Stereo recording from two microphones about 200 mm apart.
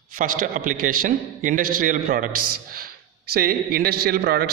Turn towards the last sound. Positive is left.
turn(degrees=-50)  # may be behind; listen again after turning